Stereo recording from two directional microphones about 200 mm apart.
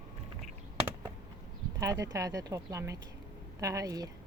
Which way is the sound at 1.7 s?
15° right (ahead or behind).